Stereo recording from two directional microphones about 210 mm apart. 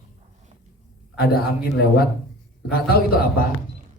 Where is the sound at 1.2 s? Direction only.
45° left (ahead or behind).